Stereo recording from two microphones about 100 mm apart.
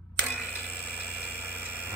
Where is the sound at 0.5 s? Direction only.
15° left (ahead or behind).